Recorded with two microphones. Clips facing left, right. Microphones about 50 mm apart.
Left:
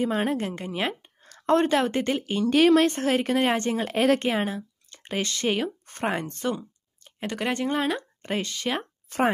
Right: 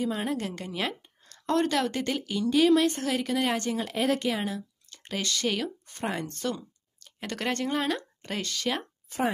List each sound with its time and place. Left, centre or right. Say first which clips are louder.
0.0 s speech: left 4 dB; left
0.4 s a woman's voice: left 3 dB; left
2.4 s speech: left 3 dB; left
2.9 s speech: left 5 dB; left
5.9 s speech: left 4 dB; left
7.2 s speech: left 3 dB; centre
8.3 s speech: left 3 dB; left